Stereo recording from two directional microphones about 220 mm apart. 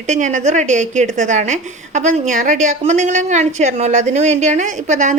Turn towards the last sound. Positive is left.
turn(degrees=-35)  # may be behind; listen again after turning